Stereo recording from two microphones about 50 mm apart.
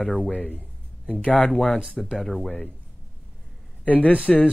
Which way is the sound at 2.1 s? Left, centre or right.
Centre.